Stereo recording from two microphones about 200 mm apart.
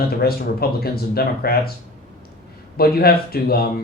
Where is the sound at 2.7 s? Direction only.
50° left (ahead or behind).